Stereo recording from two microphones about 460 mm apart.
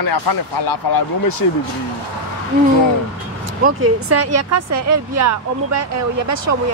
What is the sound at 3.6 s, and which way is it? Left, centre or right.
Speech, right.